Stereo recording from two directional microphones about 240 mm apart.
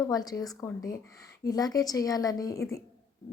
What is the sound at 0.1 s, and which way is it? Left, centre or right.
A woman's voice, centre.